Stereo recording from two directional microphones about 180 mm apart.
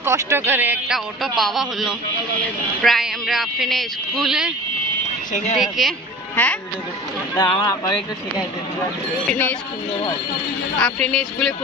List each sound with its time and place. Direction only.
0.0 s a man's voice: 15° right (ahead or behind)
5.6 s a woman's voice: centre (ahead or behind)
7.3 s speech: 20° left (ahead or behind)
9.3 s speech: 10° left (ahead or behind)
10.8 s a man's voice: 5° left (ahead or behind)